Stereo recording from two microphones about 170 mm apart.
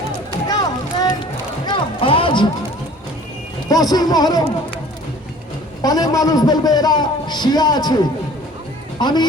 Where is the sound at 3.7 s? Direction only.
20° left (ahead or behind).